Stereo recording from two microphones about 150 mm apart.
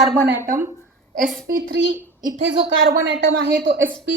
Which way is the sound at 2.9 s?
65° right (ahead or behind).